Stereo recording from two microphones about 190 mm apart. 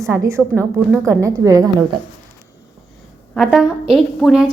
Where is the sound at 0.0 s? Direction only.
15° right (ahead or behind).